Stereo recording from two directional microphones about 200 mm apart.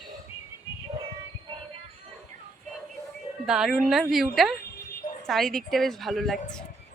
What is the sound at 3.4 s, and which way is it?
A woman's voice, 5° right (ahead or behind).